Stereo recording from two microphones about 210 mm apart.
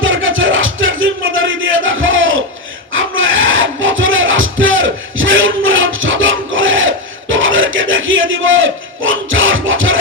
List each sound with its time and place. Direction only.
0.0 s music: 65° right (ahead or behind)